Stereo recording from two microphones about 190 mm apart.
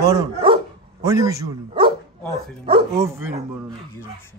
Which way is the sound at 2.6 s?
30° right (ahead or behind).